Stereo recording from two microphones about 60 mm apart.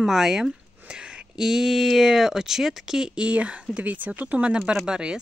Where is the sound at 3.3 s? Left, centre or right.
Right.